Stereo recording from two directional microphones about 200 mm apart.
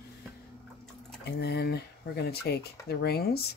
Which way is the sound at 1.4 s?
55° left (ahead or behind).